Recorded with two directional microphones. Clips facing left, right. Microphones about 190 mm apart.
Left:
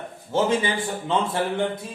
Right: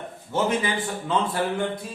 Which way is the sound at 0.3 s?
25° left (ahead or behind).